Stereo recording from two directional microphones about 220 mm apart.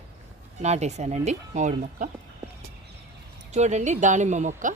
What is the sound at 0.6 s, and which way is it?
Speech, 30° right (ahead or behind).